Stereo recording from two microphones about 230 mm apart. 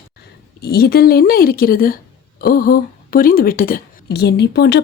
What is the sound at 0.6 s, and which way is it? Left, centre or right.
Speech, left.